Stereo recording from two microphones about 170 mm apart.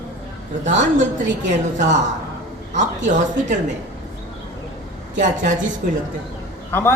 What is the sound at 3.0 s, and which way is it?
Speech, 45° right (ahead or behind).